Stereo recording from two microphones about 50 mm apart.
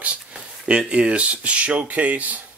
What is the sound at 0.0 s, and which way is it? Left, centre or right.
Speech, right.